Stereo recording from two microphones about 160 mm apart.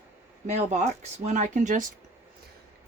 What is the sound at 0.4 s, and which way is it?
Speech, 45° right (ahead or behind).